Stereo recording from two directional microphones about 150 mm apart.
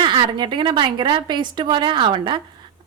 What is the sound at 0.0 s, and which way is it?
A woman's voice, 35° right (ahead or behind).